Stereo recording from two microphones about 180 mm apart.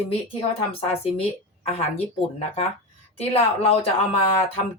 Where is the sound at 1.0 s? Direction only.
35° left (ahead or behind).